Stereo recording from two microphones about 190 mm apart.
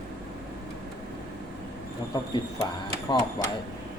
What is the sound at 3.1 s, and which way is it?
Speech, 20° left (ahead or behind).